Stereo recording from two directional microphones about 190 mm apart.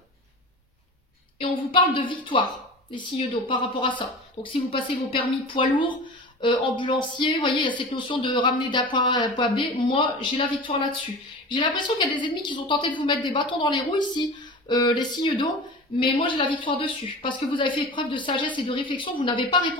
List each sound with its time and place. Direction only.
1.4 s a woman's voice: 25° left (ahead or behind)